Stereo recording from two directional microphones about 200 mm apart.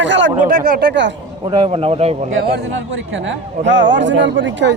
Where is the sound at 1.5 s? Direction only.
25° right (ahead or behind).